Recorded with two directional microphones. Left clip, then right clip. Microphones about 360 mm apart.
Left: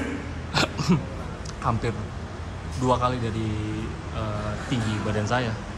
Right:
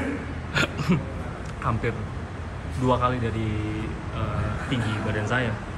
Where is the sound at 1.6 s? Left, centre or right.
Centre.